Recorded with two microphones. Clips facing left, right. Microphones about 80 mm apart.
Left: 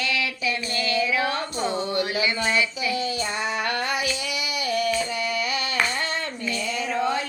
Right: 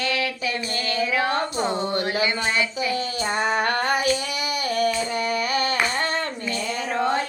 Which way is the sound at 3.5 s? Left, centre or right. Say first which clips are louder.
Right 3 dB; right.